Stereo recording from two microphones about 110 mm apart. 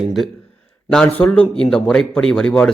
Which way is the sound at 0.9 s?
15° left (ahead or behind).